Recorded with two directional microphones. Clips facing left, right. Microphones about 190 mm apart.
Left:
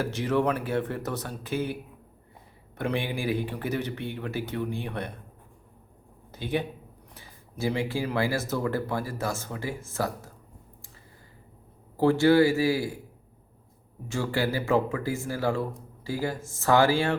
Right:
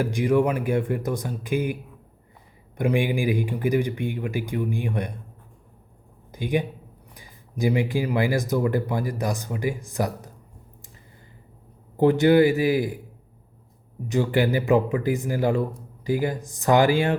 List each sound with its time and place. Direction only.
0.0 s speech: 15° right (ahead or behind)
6.3 s speech: 15° right (ahead or behind)
11.9 s speech: 20° right (ahead or behind)
14.1 s speech: 20° right (ahead or behind)